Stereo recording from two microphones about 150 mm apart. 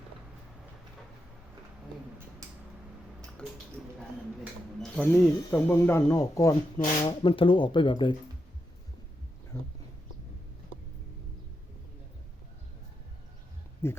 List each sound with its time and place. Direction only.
4.8 s speech: 5° left (ahead or behind); by 6.6 s 20° left (ahead or behind)
7.0 s speech: 35° left (ahead or behind)
13.8 s speech: 15° left (ahead or behind)